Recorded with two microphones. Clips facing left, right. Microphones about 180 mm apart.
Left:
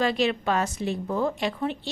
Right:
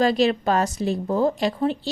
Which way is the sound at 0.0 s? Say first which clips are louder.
Right 5 dB; 40° right (ahead or behind).